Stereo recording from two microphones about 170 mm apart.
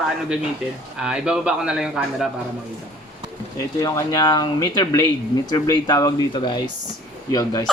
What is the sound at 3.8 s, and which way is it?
Speech, 20° left (ahead or behind).